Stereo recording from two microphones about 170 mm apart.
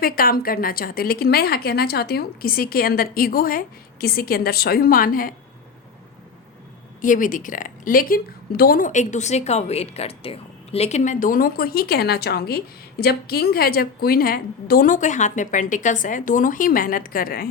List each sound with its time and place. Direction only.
0.0 s speech: 60° left (ahead or behind)
7.0 s a woman's voice: 50° left (ahead or behind)